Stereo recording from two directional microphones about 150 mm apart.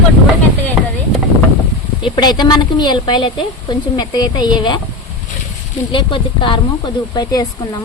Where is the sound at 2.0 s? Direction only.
30° left (ahead or behind).